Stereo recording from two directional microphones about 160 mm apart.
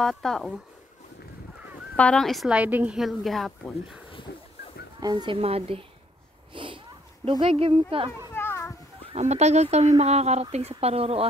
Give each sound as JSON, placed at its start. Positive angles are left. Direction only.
{"t": 0.0, "sound": "a woman's voice", "side_deg": 0}
{"t": 2.0, "sound": "a woman's voice", "side_deg": 5}
{"t": 5.0, "sound": "speech", "side_deg": -30}
{"t": 6.5, "sound": "a sound", "side_deg": -30}
{"t": 7.2, "sound": "speech", "side_deg": -35}
{"t": 8.3, "sound": "children playing", "side_deg": 15}
{"t": 9.1, "sound": "speech", "side_deg": -45}